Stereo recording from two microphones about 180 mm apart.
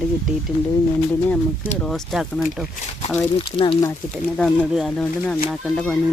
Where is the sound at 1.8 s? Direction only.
Centre (ahead or behind).